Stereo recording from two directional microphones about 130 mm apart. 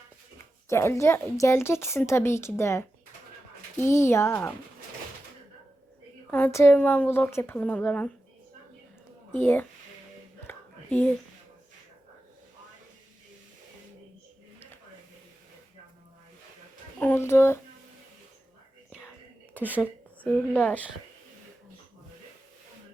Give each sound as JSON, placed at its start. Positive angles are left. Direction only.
{"t": 0.7, "sound": "a woman's voice", "side_deg": 20}
{"t": 6.3, "sound": "a woman's voice", "side_deg": 15}
{"t": 9.3, "sound": "a woman's voice", "side_deg": 15}
{"t": 10.4, "sound": "whispering", "side_deg": 15}
{"t": 17.0, "sound": "speech", "side_deg": 15}
{"t": 19.5, "sound": "a woman's voice", "side_deg": -15}
{"t": 20.5, "sound": "a woman's voice", "side_deg": 10}